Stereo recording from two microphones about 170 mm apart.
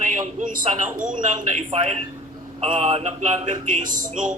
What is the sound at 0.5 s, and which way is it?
Speech, 50° right (ahead or behind).